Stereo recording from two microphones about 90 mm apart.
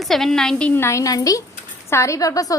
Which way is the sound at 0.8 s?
30° left (ahead or behind).